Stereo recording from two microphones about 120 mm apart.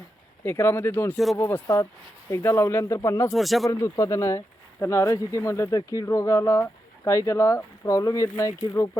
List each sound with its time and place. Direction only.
0.4 s speech: 20° left (ahead or behind)
3.3 s speech: centre (ahead or behind)
3.7 s speech: 25° left (ahead or behind)